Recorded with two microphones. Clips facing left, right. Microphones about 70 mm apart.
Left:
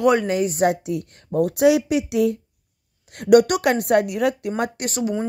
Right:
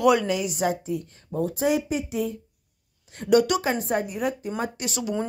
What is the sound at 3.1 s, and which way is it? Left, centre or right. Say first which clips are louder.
A woman's voice: left 5 dB; left.